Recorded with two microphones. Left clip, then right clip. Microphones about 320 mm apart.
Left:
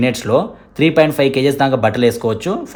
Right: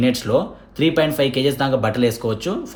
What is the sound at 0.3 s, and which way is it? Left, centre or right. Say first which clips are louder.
Speech: left 4 dB; left.